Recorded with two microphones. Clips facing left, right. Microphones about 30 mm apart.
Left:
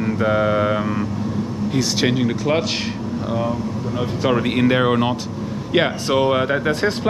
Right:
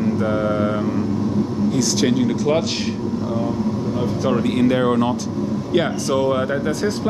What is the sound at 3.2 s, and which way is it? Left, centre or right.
Speech, left.